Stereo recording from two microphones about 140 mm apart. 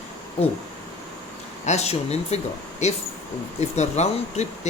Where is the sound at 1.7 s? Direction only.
50° left (ahead or behind).